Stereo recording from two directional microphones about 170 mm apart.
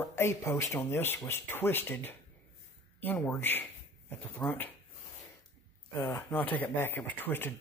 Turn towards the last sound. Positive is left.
turn(degrees=10)  # may be behind; listen again after turning